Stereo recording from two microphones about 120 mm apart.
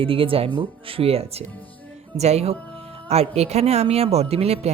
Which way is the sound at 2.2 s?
65° right (ahead or behind).